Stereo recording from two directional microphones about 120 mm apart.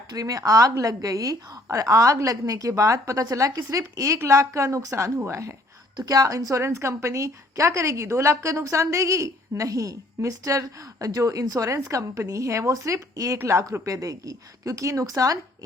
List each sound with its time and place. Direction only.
0.1 s a woman's voice: 30° right (ahead or behind)